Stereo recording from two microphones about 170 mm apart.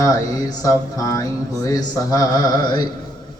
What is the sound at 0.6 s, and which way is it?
Speech, 20° left (ahead or behind).